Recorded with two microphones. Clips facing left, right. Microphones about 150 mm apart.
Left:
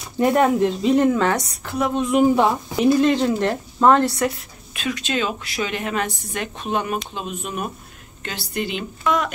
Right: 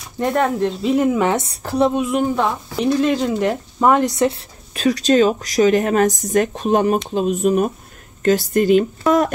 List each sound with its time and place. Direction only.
0.2 s speech: 5° left (ahead or behind)
1.2 s speech: 25° right (ahead or behind)
1.6 s a woman's voice: 35° right (ahead or behind)
2.0 s speech: centre (ahead or behind)
2.2 s speech: 10° left (ahead or behind); by 4.4 s 20° right (ahead or behind)
4.7 s a woman's voice: 40° right (ahead or behind)